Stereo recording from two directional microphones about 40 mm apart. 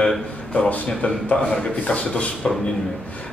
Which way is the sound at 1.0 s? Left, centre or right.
Left.